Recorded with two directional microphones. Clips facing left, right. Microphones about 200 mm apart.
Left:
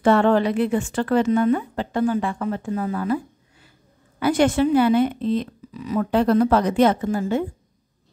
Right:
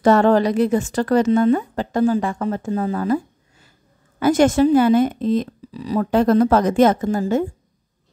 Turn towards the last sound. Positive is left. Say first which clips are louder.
# right 3 dB
turn(degrees=-45)  # may be behind; listen again after turning